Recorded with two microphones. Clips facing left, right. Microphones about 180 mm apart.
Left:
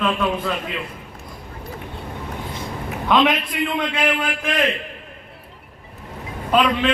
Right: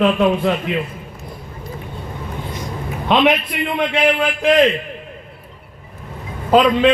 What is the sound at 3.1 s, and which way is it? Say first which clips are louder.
Speech: right 3 dB; 25° right (ahead or behind).